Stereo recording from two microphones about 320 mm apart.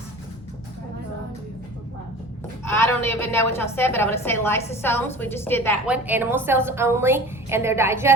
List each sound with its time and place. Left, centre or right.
2.6 s a woman's voice: centre
5.8 s a woman's voice: centre